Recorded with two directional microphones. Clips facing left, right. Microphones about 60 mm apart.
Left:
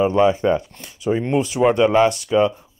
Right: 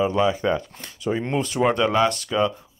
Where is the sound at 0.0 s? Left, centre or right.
Left.